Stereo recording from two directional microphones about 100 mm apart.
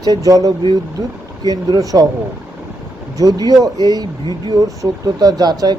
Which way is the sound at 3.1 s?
40° right (ahead or behind).